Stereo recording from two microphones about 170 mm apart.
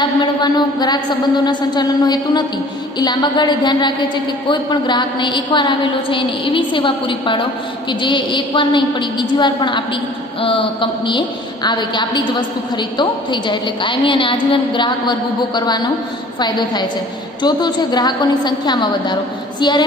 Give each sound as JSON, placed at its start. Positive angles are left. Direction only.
{"t": 0.0, "sound": "a woman's voice", "side_deg": 25}